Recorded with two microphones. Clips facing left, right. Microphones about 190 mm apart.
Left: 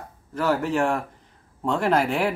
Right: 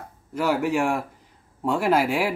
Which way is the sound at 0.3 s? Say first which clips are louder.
Right 1 dB; 10° right (ahead or behind).